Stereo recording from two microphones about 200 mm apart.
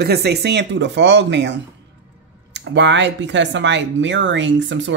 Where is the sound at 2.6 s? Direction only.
65° right (ahead or behind).